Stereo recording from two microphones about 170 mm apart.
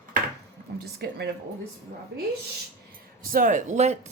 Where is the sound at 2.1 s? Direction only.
80° right.